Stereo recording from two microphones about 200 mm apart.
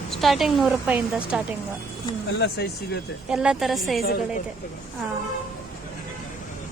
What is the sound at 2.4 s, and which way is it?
Speech, 55° left (ahead or behind).